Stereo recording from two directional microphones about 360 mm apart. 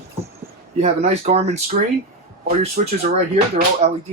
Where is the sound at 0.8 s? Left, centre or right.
Centre.